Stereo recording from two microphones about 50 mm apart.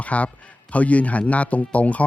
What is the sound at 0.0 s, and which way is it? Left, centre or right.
Speech, left.